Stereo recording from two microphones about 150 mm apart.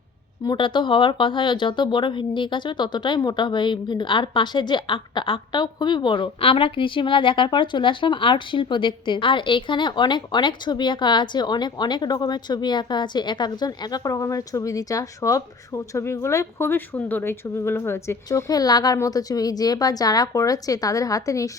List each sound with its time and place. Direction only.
0.4 s a woman's voice: 30° left (ahead or behind)